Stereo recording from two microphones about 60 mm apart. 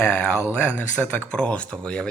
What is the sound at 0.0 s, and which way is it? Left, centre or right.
Speech, left.